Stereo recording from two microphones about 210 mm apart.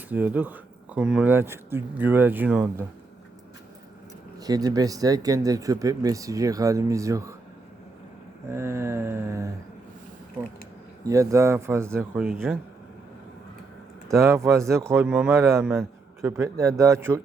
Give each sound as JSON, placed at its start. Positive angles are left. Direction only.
{"t": 0.1, "sound": "speech", "side_deg": -10}
{"t": 4.4, "sound": "speech", "side_deg": -15}
{"t": 8.4, "sound": "speech", "side_deg": -10}
{"t": 11.0, "sound": "speech", "side_deg": -15}
{"t": 14.1, "sound": "speech", "side_deg": -15}